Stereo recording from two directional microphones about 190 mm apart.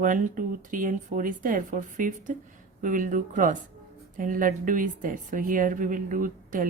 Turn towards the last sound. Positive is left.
turn(degrees=-45)  # may be behind; listen again after turning